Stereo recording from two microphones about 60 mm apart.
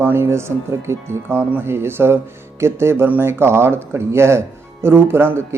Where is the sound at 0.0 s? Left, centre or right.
Right.